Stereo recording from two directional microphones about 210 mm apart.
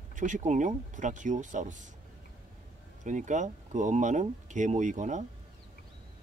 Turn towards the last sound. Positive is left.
turn(degrees=-35)  # may be behind; listen again after turning